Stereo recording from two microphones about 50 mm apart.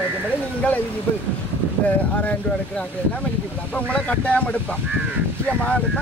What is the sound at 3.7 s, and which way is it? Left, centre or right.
Speech, left.